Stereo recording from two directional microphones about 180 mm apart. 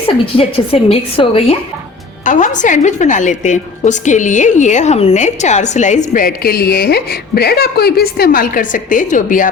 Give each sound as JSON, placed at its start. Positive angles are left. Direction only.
{"t": 0.3, "sound": "a woman's voice", "side_deg": 30}
{"t": 2.2, "sound": "a woman's voice", "side_deg": 45}